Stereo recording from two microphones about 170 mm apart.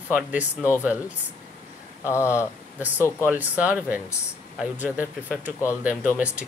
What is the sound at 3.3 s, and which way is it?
Speech, 10° right (ahead or behind).